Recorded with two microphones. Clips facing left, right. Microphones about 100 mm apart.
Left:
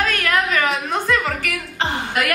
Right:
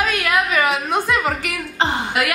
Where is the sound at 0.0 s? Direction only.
10° right (ahead or behind).